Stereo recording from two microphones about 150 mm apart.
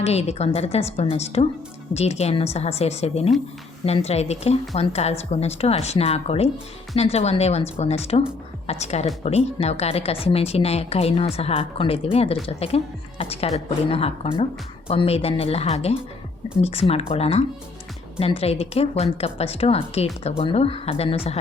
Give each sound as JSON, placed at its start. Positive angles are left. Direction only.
{"t": 0.0, "sound": "a woman's voice", "side_deg": 45}